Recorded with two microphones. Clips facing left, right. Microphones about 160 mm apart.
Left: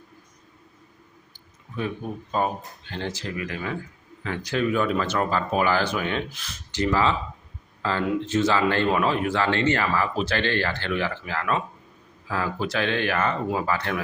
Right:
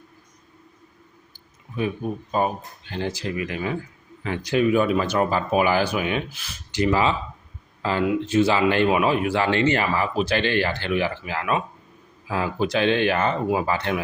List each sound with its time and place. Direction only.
2.9 s speech: 10° right (ahead or behind)